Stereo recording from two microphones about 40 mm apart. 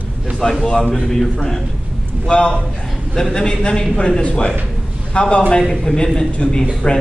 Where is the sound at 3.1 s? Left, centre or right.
Centre.